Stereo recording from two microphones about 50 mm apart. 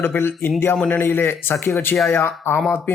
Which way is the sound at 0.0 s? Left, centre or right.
Left.